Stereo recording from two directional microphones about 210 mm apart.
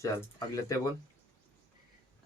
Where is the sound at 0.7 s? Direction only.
15° left (ahead or behind).